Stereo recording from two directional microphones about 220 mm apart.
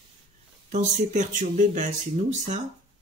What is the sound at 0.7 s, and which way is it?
Speech, 35° right (ahead or behind).